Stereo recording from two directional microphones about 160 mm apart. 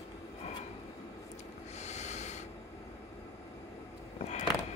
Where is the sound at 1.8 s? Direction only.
45° left (ahead or behind).